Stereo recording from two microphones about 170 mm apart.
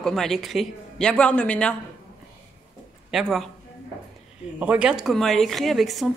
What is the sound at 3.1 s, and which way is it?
Speech, centre (ahead or behind).